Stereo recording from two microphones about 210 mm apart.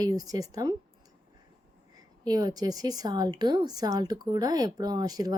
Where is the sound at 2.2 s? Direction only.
20° right (ahead or behind).